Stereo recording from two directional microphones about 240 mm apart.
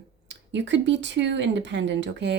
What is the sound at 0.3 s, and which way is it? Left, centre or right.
Speech, right.